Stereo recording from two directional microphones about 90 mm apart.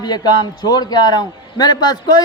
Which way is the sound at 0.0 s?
50° left (ahead or behind).